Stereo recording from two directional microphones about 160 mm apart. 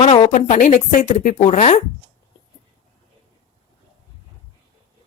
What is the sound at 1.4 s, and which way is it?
Speech, 40° left (ahead or behind).